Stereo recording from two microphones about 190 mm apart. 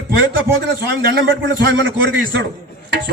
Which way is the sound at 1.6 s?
65° right (ahead or behind).